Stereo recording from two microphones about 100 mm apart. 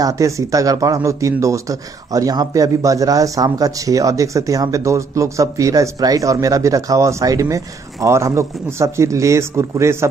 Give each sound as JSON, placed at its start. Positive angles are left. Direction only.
{"t": 0.0, "sound": "speech", "side_deg": -35}